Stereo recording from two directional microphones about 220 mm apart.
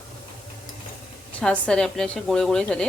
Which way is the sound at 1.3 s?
5° left (ahead or behind).